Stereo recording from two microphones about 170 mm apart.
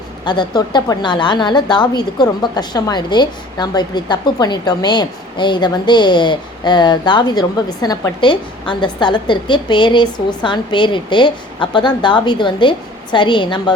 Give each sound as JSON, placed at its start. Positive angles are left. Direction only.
{"t": 0.3, "sound": "a woman's voice", "side_deg": 25}